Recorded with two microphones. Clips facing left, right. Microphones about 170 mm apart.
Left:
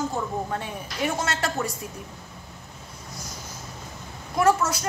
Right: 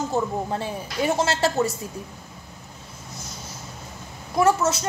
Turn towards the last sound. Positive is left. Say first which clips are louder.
# right 2 dB
turn(degrees=-25)  # may be behind; listen again after turning